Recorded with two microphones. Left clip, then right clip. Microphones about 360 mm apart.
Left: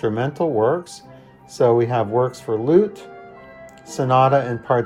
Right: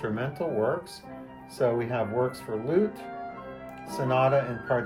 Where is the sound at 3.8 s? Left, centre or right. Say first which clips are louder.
Left 8 dB; centre.